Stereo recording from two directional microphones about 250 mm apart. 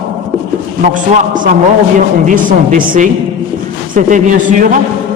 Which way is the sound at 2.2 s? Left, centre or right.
Right.